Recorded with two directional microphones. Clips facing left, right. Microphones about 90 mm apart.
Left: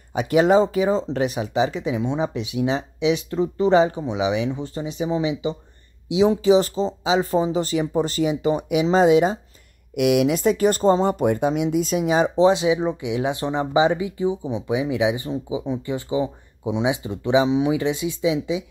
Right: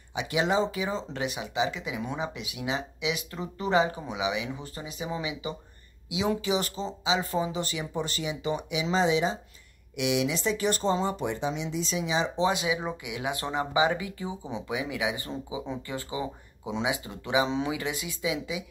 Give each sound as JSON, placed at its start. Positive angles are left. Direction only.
{"t": 0.1, "sound": "speech", "side_deg": 45}
{"t": 12.4, "sound": "speech", "side_deg": 30}
{"t": 17.5, "sound": "speech", "side_deg": 10}
{"t": 17.7, "sound": "speech", "side_deg": 25}